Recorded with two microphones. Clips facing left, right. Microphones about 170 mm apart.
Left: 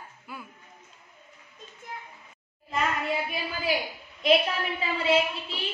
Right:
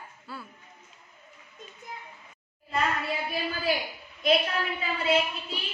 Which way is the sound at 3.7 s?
25° left (ahead or behind).